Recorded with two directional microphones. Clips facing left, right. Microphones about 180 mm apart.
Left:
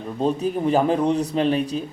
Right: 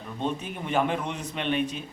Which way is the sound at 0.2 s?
35° left (ahead or behind).